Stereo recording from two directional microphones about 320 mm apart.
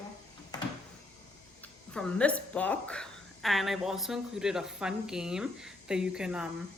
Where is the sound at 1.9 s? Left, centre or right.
Centre.